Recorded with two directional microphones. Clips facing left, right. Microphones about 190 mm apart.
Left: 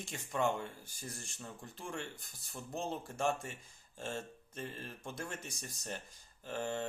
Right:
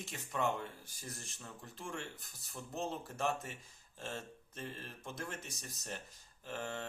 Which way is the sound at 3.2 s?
Centre (ahead or behind).